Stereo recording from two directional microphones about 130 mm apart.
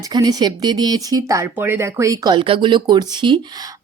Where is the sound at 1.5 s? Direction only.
15° right (ahead or behind); by 3.4 s 35° right (ahead or behind).